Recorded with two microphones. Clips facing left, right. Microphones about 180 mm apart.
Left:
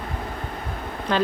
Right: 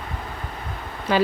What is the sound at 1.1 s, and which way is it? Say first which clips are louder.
Speech: right 2 dB; 5° right (ahead or behind).